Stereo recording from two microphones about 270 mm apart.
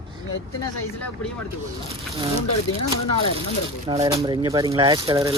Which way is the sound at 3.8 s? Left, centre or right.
Centre.